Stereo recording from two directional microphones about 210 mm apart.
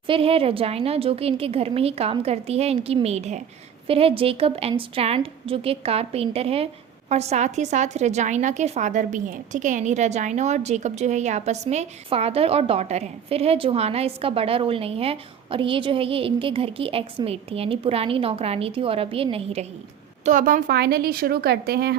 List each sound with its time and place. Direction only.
0.1 s a woman's voice: 25° right (ahead or behind)
20.2 s speech: 40° right (ahead or behind)